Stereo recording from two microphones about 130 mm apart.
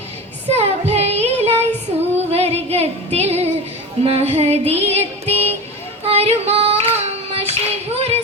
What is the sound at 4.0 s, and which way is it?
Child singing, 50° right (ahead or behind).